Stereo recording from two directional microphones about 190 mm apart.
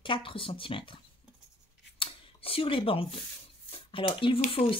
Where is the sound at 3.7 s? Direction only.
30° left (ahead or behind).